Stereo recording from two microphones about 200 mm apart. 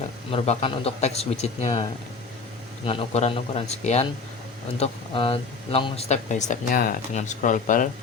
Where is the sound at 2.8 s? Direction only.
30° left (ahead or behind).